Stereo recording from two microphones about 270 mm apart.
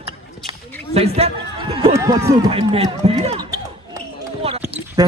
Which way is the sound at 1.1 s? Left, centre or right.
Right.